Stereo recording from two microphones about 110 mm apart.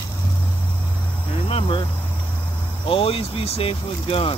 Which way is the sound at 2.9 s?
55° left (ahead or behind).